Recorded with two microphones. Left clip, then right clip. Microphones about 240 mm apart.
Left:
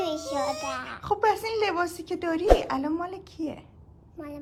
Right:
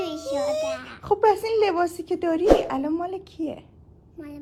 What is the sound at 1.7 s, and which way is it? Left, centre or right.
Speech, centre.